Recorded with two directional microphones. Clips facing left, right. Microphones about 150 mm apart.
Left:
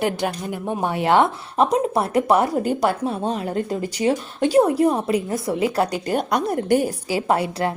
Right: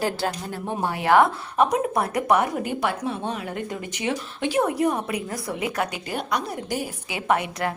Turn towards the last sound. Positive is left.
turn(degrees=30)  # may be behind; listen again after turning